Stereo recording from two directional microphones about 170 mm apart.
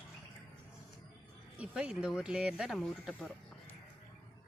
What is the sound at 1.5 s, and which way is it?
Speech, 5° right (ahead or behind).